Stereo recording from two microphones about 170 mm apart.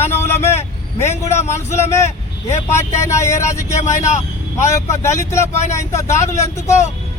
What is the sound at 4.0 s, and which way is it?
Speech, 45° left (ahead or behind).